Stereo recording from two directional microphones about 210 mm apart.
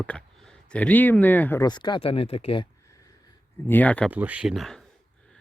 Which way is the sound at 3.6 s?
10° left (ahead or behind).